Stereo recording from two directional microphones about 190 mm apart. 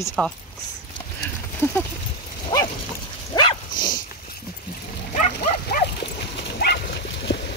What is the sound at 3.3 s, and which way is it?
Dog, 25° left (ahead or behind).